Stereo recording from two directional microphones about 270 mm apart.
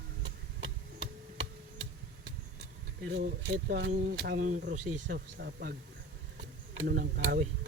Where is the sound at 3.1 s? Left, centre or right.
Right.